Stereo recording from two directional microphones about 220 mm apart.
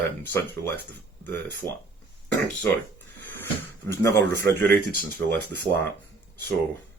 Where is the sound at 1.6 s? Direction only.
20° right (ahead or behind).